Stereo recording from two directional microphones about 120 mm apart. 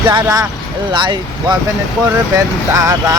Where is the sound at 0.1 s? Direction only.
35° right (ahead or behind).